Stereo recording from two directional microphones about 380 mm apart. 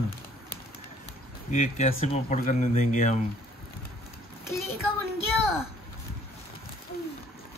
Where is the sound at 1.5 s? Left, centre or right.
Centre.